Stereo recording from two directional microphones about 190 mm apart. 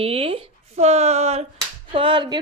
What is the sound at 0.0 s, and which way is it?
A woman's voice, 30° right (ahead or behind).